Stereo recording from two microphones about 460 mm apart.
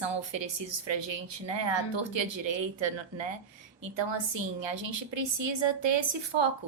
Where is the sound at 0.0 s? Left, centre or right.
Right.